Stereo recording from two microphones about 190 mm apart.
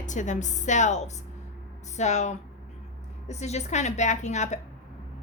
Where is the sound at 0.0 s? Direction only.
40° left (ahead or behind).